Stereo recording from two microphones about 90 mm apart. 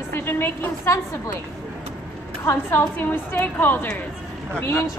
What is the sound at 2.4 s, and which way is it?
A woman's voice, 30° left (ahead or behind).